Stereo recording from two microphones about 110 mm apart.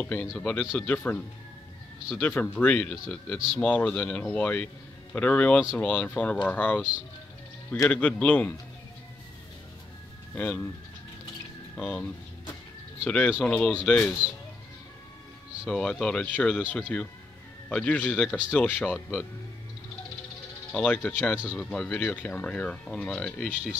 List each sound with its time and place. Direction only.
0.0 s speech: 15° left (ahead or behind)
3.3 s speech: 5° right (ahead or behind)
3.6 s speech: 15° left (ahead or behind)
7.9 s speech: 10° left (ahead or behind)
10.3 s speech: 15° left (ahead or behind)
11.7 s speech: 10° left (ahead or behind)
15.7 s speech: 10° left (ahead or behind)
20.7 s speech: 15° left (ahead or behind)